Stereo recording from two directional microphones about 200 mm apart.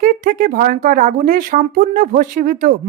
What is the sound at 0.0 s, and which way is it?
Speech, 45° right (ahead or behind).